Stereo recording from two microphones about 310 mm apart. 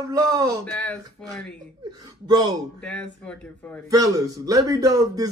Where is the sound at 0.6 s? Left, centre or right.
Centre.